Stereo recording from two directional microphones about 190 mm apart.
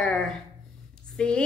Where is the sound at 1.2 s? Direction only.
5° left (ahead or behind).